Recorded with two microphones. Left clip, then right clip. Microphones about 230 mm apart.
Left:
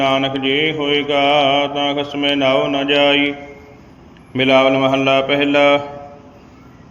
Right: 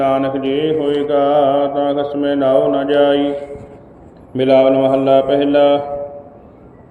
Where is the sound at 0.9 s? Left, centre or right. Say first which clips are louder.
Even; left.